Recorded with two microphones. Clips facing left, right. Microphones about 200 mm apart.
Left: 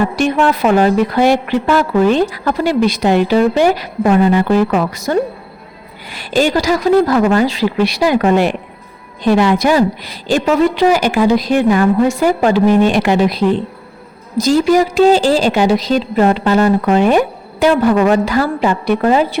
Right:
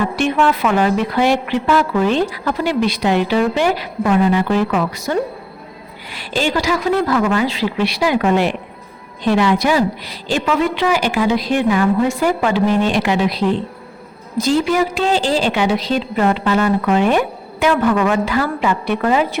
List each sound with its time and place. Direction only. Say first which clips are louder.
0.2 s a woman's voice: left 1 dB; 40° left (ahead or behind)
12.7 s a woman's voice: left 5 dB; 50° left (ahead or behind); by 19.4 s 35° left (ahead or behind)